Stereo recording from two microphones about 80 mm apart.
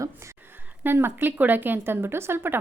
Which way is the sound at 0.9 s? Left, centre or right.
Right.